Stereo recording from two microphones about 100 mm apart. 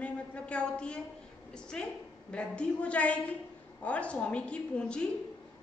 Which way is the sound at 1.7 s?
5° left (ahead or behind).